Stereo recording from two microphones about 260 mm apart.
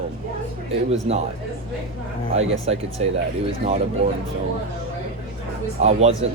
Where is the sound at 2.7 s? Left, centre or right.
Right.